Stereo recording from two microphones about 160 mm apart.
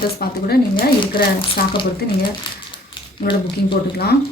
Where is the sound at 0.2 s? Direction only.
75° left (ahead or behind).